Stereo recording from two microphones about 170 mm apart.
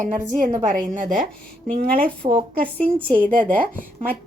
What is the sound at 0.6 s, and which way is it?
Speech, 50° right (ahead or behind).